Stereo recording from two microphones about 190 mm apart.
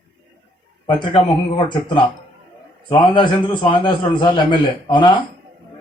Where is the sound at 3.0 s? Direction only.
25° left (ahead or behind).